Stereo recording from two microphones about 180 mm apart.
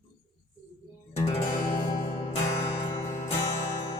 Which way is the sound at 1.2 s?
35° left (ahead or behind).